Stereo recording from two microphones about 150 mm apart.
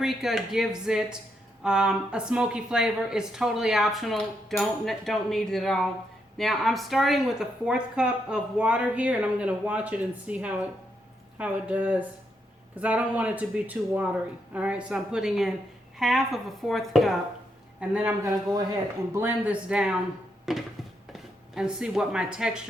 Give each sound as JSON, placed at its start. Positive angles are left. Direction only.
{"t": 0.0, "sound": "speech", "side_deg": 0}
{"t": 18.2, "sound": "speech", "side_deg": -20}